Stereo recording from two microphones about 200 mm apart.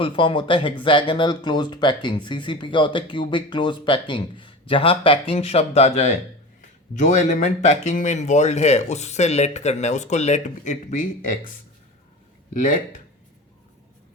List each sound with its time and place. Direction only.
0.0 s speech: 25° left (ahead or behind)
12.5 s speech: 40° left (ahead or behind)